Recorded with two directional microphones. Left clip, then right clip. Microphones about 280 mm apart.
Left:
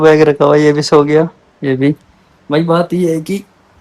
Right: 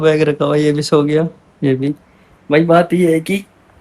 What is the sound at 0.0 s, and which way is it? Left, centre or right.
Speech, centre.